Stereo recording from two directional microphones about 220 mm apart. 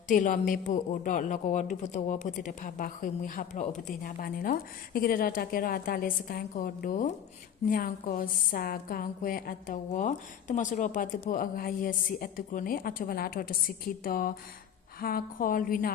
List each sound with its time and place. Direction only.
0.1 s a woman's voice: 35° left (ahead or behind)